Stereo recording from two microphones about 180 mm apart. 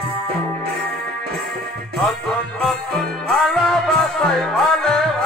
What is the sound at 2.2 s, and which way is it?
Music, 5° left (ahead or behind).